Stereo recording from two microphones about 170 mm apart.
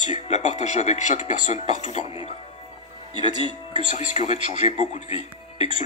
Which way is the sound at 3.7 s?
45° left (ahead or behind).